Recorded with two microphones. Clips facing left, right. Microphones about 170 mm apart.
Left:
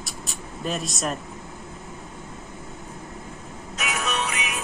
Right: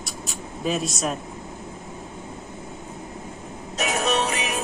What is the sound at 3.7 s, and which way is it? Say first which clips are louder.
Music: right 5 dB; 35° right (ahead or behind).